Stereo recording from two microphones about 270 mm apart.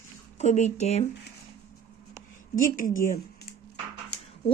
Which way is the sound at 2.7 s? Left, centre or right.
Left.